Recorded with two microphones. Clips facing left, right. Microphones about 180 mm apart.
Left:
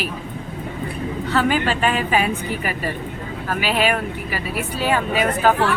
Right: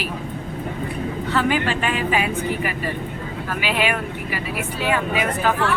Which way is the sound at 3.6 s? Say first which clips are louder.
Left 2 dB; 40° left (ahead or behind).